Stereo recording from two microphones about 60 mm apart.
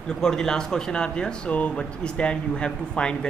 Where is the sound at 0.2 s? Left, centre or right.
Centre.